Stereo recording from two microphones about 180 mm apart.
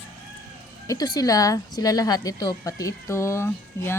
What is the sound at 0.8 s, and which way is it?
A woman's voice, 20° left (ahead or behind).